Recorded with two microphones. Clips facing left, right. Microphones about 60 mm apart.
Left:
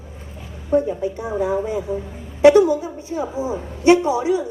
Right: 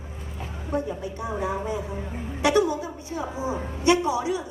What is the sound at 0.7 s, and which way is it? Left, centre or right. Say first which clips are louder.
Speech: left 10 dB; left.